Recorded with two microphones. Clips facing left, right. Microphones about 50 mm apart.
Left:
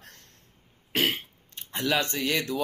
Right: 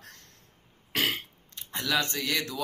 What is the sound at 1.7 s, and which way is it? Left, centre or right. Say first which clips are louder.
Speech: left 2 dB; left.